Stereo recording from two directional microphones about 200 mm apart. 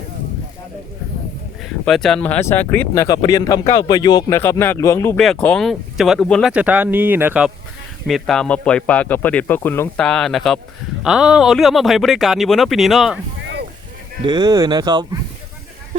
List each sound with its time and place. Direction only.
1.8 s speech: centre (ahead or behind)
13.4 s a sound: 60° right (ahead or behind)
14.3 s speech: 20° right (ahead or behind)